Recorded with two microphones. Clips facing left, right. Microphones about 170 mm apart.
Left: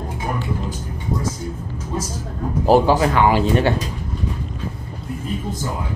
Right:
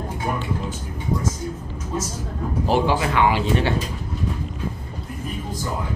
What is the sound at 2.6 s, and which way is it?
Speech, 40° left (ahead or behind).